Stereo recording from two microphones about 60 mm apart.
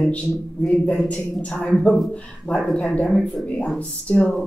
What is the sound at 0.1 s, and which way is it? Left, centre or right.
A man's voice, left.